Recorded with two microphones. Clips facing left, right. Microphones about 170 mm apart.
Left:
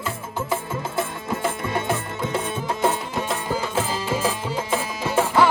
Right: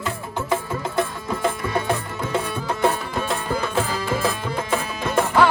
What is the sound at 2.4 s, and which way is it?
Music, 20° left (ahead or behind).